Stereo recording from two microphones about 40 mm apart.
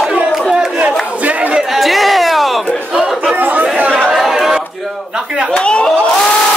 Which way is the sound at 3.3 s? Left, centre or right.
Right.